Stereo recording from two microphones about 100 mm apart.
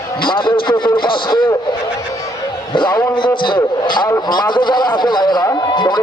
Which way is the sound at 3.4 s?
50° left (ahead or behind).